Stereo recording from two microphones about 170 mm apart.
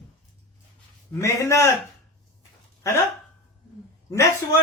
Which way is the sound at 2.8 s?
20° left (ahead or behind).